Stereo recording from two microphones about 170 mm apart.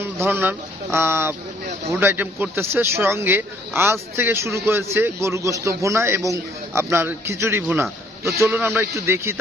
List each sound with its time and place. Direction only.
0.0 s a man's voice: 15° right (ahead or behind)